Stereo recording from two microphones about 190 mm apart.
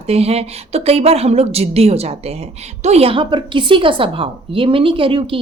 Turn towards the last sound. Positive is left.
turn(degrees=-25)  # may be behind; listen again after turning